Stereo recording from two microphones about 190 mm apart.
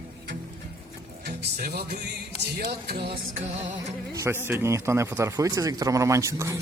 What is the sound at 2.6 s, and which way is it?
Speech, 55° right (ahead or behind).